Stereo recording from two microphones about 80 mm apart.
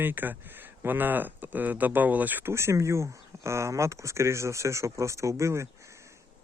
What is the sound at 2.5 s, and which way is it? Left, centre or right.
Speech, right.